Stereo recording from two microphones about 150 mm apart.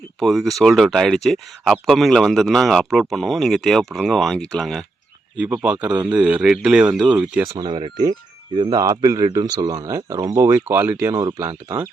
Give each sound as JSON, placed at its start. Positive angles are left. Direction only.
{"t": 0.2, "sound": "speech", "side_deg": 0}
{"t": 5.4, "sound": "speech", "side_deg": -10}
{"t": 7.4, "sound": "speech", "side_deg": -25}